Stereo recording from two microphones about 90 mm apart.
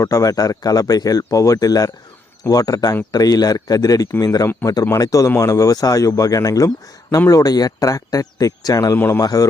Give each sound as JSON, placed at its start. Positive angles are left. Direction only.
{"t": 0.0, "sound": "speech", "side_deg": 40}
{"t": 9.0, "sound": "a man's voice", "side_deg": 30}
{"t": 9.2, "sound": "speech", "side_deg": 40}